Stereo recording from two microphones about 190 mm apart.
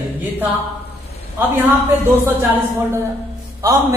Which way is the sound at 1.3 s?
10° right (ahead or behind).